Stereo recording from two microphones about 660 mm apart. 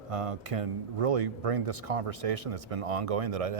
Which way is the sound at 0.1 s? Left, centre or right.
Right.